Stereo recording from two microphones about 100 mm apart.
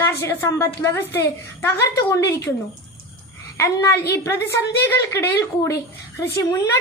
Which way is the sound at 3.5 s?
30° left (ahead or behind).